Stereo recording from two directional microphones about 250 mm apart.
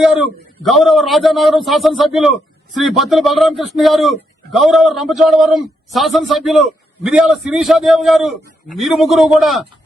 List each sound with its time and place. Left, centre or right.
0.0 s a man's voice: centre